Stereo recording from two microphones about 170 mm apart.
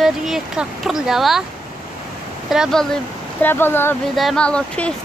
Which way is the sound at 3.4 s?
10° left (ahead or behind).